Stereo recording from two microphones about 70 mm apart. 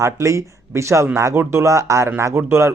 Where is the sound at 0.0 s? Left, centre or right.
Right.